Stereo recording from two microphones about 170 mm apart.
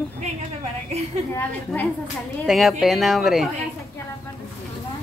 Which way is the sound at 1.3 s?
10° left (ahead or behind).